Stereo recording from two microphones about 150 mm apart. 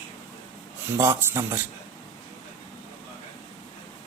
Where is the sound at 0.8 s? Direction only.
15° right (ahead or behind).